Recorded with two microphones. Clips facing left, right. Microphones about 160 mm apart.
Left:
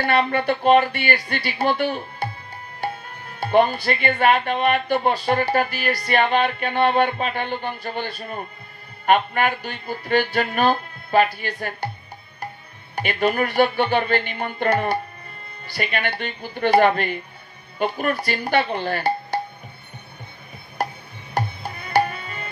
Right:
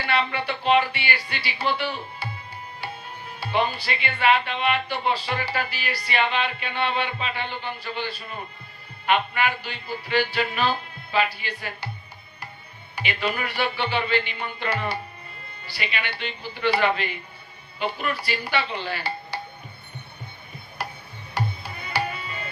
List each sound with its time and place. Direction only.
0.0 s speech: 50° left (ahead or behind)
2.8 s music: 50° left (ahead or behind)
3.3 s speech: 50° left (ahead or behind)
12.9 s speech: 50° left (ahead or behind)
20.8 s tick-tock: 45° left (ahead or behind)
21.4 s music: 50° left (ahead or behind)